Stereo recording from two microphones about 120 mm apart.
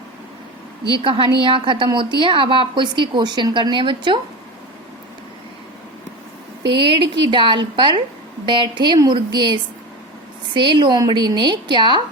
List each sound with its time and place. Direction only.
0.9 s a woman's voice: 45° right (ahead or behind)
6.7 s a woman's voice: 40° right (ahead or behind)